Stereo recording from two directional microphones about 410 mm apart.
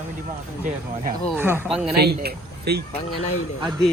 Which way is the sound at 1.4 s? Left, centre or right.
Centre.